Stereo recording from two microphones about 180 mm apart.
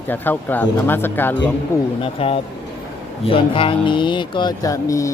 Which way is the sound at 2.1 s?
30° left (ahead or behind).